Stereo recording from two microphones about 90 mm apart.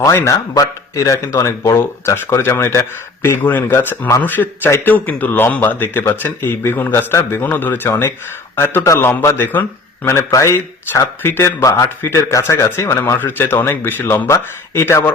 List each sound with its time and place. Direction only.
0.3 s a man's voice: 40° left (ahead or behind)